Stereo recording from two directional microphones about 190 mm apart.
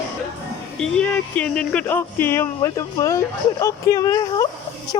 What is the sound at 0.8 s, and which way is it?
Speech, 5° left (ahead or behind).